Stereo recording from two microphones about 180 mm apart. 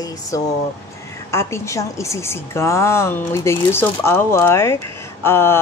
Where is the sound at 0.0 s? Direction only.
20° left (ahead or behind).